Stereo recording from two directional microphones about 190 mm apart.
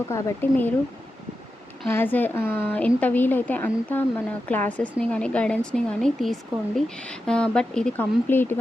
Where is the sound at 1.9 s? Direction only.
10° left (ahead or behind).